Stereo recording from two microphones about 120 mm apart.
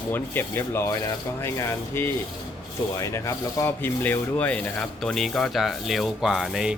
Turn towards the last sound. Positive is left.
turn(degrees=-5)  # may be behind; listen again after turning